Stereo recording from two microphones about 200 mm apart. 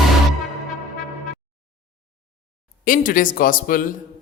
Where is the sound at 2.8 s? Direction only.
45° left (ahead or behind).